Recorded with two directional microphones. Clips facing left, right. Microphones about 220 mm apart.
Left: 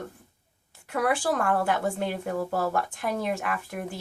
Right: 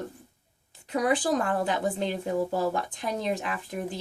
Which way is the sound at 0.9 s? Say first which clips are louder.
Right 1 dB; 20° right (ahead or behind).